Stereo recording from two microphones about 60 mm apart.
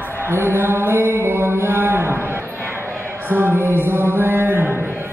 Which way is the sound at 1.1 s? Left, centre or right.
Right.